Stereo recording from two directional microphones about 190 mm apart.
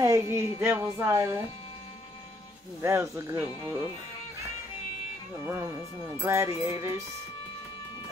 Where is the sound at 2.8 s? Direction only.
15° right (ahead or behind).